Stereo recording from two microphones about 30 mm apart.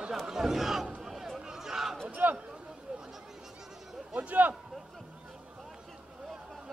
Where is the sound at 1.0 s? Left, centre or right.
Centre.